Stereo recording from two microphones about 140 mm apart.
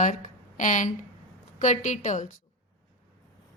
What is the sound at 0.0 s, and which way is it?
A woman's voice, 65° left (ahead or behind).